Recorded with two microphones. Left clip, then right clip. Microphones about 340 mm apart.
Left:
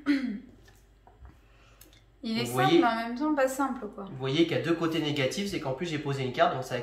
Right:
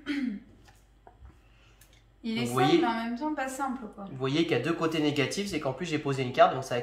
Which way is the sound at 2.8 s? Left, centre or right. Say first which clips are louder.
Left 3 dB; centre.